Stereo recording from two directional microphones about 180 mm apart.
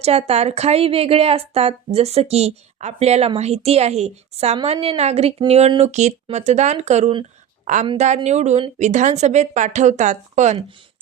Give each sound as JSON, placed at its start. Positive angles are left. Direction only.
{"t": 0.0, "sound": "a woman's voice", "side_deg": -35}